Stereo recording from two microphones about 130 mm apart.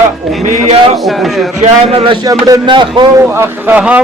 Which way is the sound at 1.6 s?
50° right (ahead or behind).